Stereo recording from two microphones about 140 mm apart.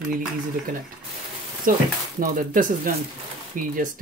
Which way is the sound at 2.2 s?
75° right (ahead or behind).